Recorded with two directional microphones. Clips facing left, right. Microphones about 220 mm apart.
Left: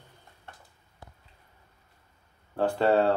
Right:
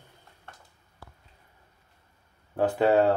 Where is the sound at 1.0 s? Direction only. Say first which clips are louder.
Even; 20° left (ahead or behind).